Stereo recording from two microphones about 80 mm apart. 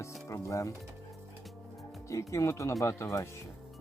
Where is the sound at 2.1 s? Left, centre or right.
Left.